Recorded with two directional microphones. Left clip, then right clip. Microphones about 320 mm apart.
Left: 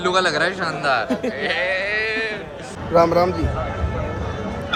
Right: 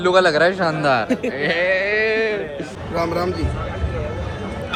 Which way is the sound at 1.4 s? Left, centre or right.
Centre.